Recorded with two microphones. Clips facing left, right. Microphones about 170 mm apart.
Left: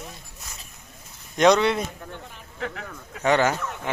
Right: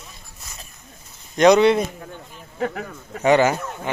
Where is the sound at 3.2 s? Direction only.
10° right (ahead or behind).